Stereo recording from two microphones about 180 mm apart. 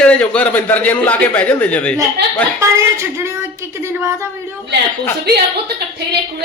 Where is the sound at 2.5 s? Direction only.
15° right (ahead or behind).